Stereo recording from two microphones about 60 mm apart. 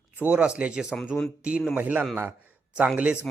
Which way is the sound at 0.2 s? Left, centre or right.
Right.